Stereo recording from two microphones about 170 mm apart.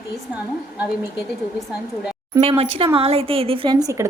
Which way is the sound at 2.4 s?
35° right (ahead or behind).